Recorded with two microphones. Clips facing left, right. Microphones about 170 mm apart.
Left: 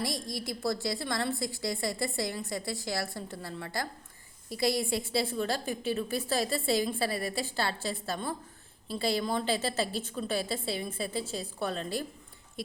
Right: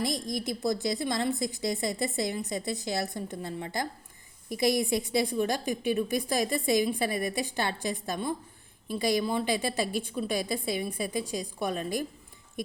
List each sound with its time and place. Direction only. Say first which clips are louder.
0.0 s a woman's voice: right 4 dB; 20° right (ahead or behind)